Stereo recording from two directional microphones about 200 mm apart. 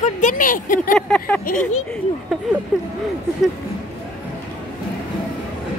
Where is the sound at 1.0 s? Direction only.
5° left (ahead or behind).